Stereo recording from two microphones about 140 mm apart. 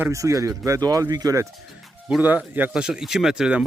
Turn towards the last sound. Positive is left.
turn(degrees=-5)  # may be behind; listen again after turning